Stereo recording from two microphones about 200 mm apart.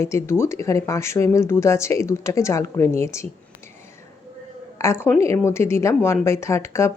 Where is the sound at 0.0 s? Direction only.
15° left (ahead or behind).